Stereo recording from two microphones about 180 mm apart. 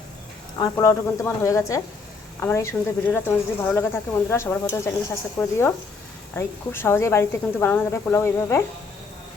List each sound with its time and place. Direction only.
0.6 s speech: 15° left (ahead or behind)